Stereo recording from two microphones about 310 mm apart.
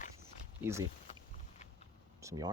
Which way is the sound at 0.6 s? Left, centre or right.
Centre.